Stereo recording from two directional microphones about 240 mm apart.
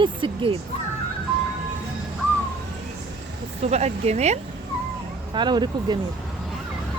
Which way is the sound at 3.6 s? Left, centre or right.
Right.